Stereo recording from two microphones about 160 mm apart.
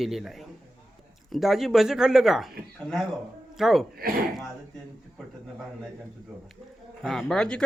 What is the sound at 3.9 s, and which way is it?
Speech, 70° right (ahead or behind).